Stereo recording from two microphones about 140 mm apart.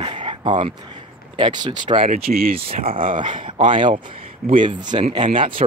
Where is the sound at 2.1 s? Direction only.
90° right.